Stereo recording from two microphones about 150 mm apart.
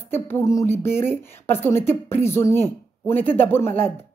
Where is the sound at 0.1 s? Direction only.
15° left (ahead or behind).